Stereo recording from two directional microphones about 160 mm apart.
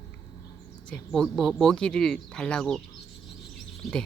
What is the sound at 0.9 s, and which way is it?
Speech, centre (ahead or behind).